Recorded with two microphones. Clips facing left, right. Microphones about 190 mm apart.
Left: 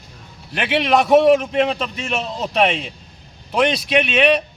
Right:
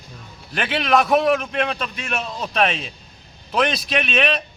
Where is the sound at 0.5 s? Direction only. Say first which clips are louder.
Left 2 dB; 10° left (ahead or behind).